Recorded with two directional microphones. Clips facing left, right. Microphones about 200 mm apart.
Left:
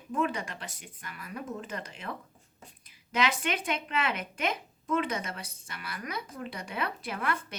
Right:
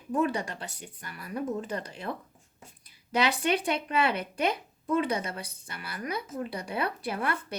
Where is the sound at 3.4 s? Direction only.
35° right (ahead or behind).